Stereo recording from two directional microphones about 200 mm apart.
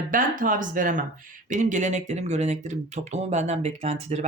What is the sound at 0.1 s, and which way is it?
Speech, 45° right (ahead or behind).